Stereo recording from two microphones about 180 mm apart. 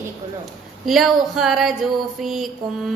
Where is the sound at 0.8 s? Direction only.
Centre (ahead or behind).